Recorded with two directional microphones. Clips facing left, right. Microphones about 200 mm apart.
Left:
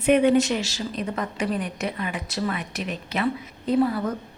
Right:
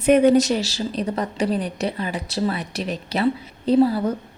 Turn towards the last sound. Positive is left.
turn(degrees=-30)  # may be behind; listen again after turning